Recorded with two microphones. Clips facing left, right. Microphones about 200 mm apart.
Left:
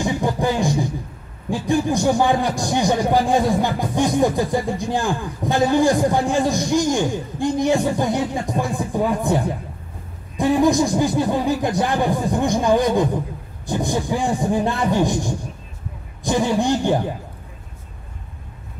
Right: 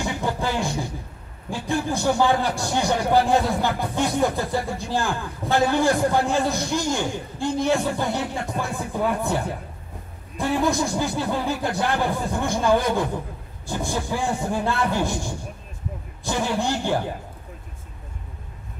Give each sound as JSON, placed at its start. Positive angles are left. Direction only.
{"t": 0.0, "sound": "beatboxing", "side_deg": 15}
{"t": 1.7, "sound": "a man's voice", "side_deg": 15}